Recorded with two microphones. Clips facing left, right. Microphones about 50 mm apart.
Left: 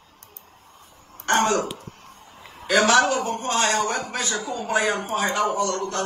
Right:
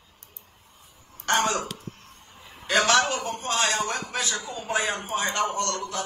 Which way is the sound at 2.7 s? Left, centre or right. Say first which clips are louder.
Left 4 dB; centre.